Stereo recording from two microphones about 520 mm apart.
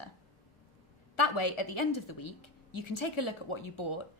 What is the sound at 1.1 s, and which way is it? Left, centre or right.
A woman's voice, left.